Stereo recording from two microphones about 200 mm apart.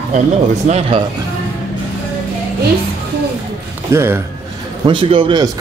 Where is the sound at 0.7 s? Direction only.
30° right (ahead or behind).